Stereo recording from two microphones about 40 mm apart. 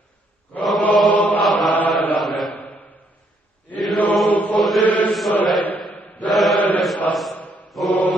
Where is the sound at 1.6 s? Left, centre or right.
Left.